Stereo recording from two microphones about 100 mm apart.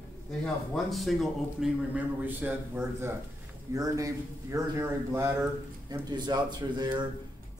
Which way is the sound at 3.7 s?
35° right (ahead or behind).